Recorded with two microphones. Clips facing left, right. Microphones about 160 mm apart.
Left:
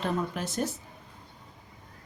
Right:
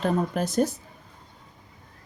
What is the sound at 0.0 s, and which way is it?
Speech, 40° right (ahead or behind).